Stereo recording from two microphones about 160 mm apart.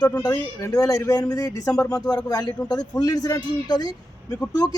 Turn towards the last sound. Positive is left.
turn(degrees=25)  # may be behind; listen again after turning